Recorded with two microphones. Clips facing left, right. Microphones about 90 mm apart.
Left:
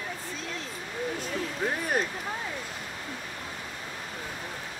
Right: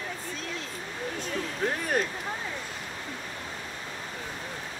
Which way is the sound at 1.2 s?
5° left (ahead or behind).